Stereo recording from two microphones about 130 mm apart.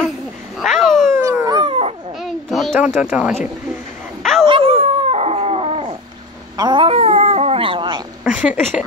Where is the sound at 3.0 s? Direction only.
10° right (ahead or behind).